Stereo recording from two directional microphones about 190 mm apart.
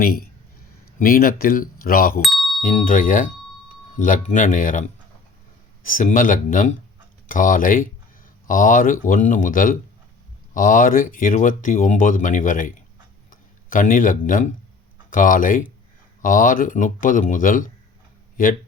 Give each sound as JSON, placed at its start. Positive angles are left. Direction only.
{"t": 0.0, "sound": "speech", "side_deg": 50}
{"t": 2.2, "sound": "a sound", "side_deg": 0}
{"t": 2.6, "sound": "speech", "side_deg": 45}